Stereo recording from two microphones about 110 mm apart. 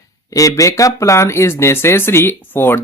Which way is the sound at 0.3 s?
30° left (ahead or behind).